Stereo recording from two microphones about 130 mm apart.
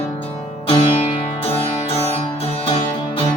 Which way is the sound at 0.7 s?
40° left (ahead or behind).